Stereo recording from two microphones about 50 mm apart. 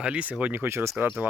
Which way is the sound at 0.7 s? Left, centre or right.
Right.